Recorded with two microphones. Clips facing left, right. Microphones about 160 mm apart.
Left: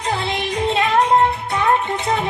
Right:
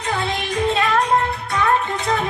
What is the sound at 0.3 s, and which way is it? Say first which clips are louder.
Music: right 1 dB; 25° left (ahead or behind).